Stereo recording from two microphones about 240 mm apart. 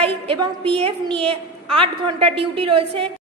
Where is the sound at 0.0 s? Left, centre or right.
Right.